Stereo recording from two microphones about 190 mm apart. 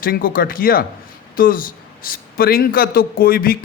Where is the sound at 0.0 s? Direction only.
50° left (ahead or behind).